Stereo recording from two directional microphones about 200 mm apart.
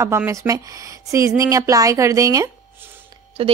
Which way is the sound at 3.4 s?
30° right (ahead or behind).